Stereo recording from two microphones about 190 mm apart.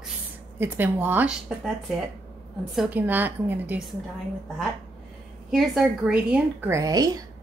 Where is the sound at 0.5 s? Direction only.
10° right (ahead or behind).